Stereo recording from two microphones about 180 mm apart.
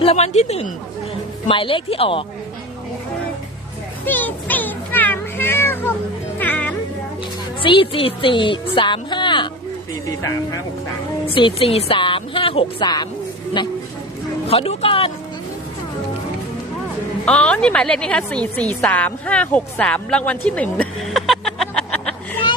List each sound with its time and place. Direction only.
0.0 s a woman's voice: 35° left (ahead or behind)
4.0 s music: 10° left (ahead or behind)
7.6 s a woman's voice: 30° left (ahead or behind)
11.3 s a woman's voice: 30° left (ahead or behind)
14.4 s speech: 30° left (ahead or behind)
17.2 s a woman's voice: 5° left (ahead or behind)